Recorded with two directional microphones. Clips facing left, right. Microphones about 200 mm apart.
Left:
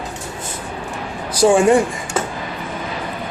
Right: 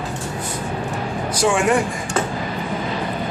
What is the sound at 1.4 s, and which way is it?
Speech, 35° left (ahead or behind).